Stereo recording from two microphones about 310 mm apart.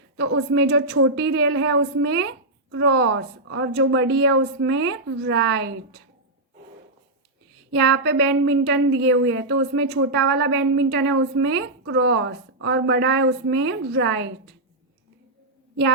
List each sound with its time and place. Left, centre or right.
0.2 s a woman's voice: right
7.7 s a woman's voice: right